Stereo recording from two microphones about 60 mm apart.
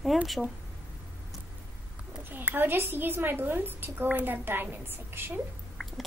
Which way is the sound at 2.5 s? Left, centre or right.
Right.